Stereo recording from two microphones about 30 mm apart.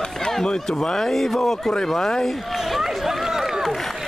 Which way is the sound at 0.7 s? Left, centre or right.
Centre.